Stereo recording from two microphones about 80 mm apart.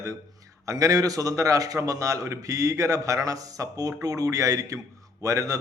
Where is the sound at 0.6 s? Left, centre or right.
Right.